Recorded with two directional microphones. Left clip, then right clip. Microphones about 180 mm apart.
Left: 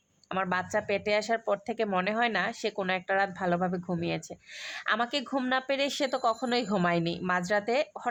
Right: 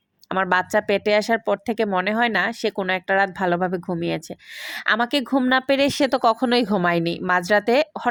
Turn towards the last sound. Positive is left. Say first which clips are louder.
# right 9 dB
turn(degrees=-35)  # may be behind; listen again after turning